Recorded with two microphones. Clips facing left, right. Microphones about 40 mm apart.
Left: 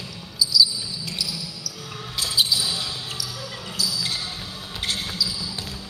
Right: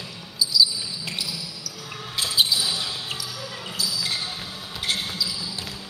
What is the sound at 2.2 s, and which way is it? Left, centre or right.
Basketball bounce, centre.